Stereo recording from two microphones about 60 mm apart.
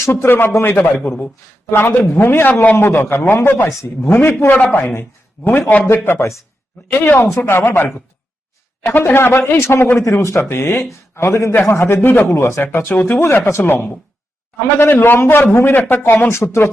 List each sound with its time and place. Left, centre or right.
0.1 s speech: left
2.7 s speech: left
3.7 s a man's voice: left
4.1 s a man's voice: left
6.1 s speech: left
8.9 s a man's voice: left
12.6 s a man's voice: left
13.3 s speech: left
15.8 s speech: left